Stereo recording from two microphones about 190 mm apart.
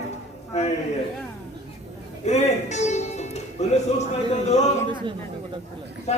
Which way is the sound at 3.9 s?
35° left (ahead or behind).